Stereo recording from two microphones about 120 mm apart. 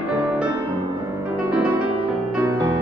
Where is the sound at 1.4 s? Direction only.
10° right (ahead or behind).